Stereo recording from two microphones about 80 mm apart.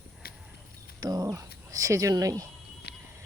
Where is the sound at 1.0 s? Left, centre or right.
Right.